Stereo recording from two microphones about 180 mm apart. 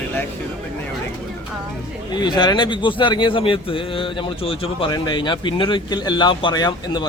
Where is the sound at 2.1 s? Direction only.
25° left (ahead or behind).